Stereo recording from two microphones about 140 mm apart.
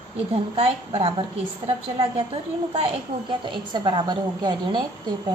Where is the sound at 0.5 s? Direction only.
40° right (ahead or behind).